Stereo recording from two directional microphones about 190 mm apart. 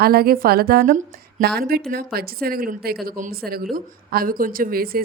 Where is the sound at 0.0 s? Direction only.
55° right (ahead or behind).